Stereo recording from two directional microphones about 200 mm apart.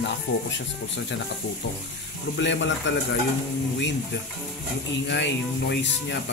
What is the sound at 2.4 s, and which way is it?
Speech, 65° left (ahead or behind).